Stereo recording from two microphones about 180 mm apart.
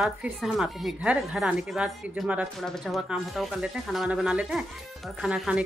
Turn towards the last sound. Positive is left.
turn(degrees=-5)  # may be behind; listen again after turning